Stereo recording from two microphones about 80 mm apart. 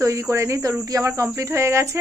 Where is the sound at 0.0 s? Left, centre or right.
Right.